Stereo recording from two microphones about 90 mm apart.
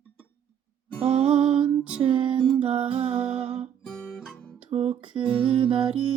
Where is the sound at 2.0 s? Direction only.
70° right (ahead or behind); by 3.5 s 90° right.